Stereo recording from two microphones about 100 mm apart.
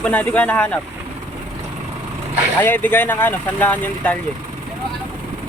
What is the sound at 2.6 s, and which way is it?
Speech, 20° left (ahead or behind).